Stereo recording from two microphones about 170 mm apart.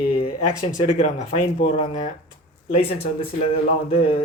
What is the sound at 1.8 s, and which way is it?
Speech, 45° left (ahead or behind).